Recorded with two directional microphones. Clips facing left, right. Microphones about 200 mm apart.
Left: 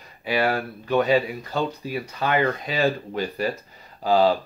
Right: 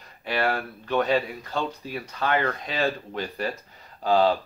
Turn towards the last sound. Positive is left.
turn(degrees=5)  # may be behind; listen again after turning